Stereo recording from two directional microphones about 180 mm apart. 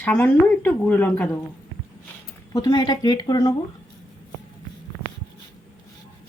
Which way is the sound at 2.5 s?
20° left (ahead or behind).